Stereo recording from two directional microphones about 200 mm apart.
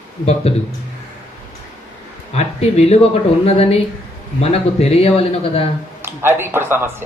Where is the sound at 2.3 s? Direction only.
35° left (ahead or behind).